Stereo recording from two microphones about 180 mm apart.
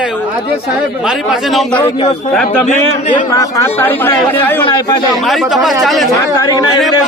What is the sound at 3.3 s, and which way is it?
Speech, 20° left (ahead or behind).